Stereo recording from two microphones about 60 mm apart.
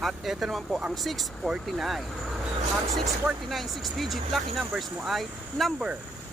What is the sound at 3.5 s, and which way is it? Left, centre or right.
Speech, centre.